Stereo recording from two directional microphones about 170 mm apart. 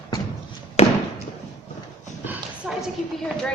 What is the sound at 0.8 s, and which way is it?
Fireworks, 35° left (ahead or behind).